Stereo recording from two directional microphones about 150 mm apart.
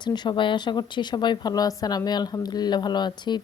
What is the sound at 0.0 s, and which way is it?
Speech, 30° left (ahead or behind).